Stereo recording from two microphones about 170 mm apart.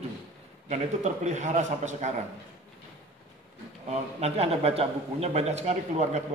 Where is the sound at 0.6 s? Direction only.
45° right (ahead or behind).